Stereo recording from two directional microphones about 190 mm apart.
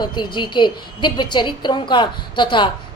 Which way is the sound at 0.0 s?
25° left (ahead or behind).